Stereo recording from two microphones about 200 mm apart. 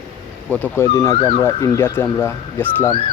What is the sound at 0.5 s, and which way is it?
Speech, 10° left (ahead or behind).